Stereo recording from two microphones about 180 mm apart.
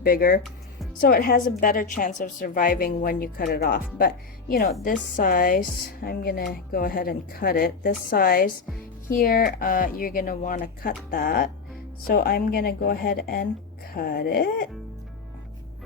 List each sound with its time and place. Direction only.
0.0 s a woman's voice: 55° left (ahead or behind)